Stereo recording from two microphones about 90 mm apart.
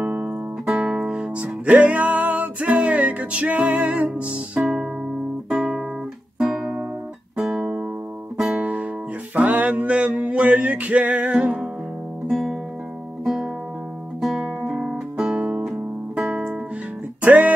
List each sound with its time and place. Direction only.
0.0 s guitar: 15° right (ahead or behind)
0.7 s music: 5° right (ahead or behind)
1.4 s music: 15° right (ahead or behind)
6.4 s guitar: 5° right (ahead or behind)
7.3 s music: 5° right (ahead or behind)
12.3 s music: centre (ahead or behind)
14.8 s guitar: 5° right (ahead or behind)
17.2 s music: 15° right (ahead or behind)